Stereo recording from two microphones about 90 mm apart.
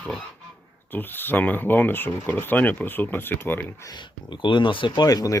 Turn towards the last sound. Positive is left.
turn(degrees=45)  # may be behind; listen again after turning